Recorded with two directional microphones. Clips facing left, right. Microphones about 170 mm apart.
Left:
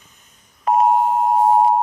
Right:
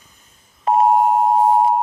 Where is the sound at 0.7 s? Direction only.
30° right (ahead or behind).